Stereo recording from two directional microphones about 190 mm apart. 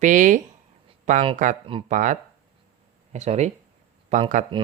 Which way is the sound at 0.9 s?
40° right (ahead or behind).